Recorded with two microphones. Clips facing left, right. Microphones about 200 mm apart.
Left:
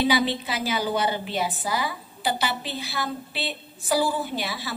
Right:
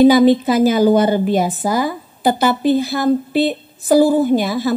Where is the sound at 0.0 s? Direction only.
45° right (ahead or behind).